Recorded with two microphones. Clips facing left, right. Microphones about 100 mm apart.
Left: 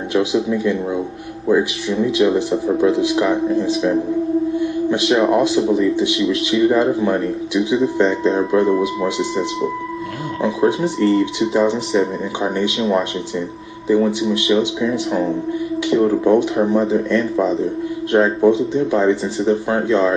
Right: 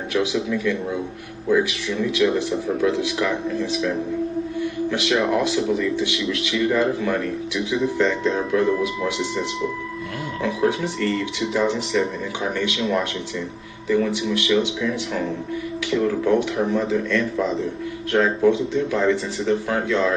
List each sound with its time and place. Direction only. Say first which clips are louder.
0.1 s speech: left 5 dB; 30° left (ahead or behind)